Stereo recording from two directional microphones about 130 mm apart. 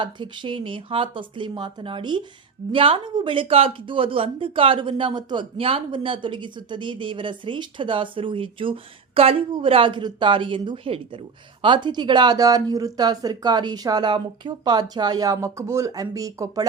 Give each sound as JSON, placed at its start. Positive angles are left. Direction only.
{"t": 0.0, "sound": "speech", "side_deg": -40}